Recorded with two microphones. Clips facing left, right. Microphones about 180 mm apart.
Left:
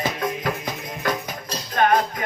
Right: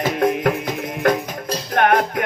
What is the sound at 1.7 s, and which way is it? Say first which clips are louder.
Music: right 2 dB; 65° right (ahead or behind).